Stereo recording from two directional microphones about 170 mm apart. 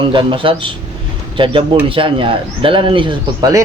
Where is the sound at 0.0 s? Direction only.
30° right (ahead or behind).